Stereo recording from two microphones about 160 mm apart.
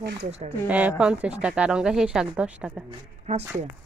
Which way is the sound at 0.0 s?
90° right.